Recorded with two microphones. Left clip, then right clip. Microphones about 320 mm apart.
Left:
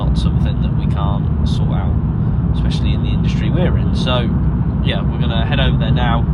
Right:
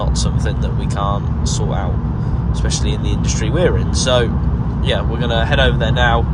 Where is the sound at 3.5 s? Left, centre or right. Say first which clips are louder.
Right 7 dB; right.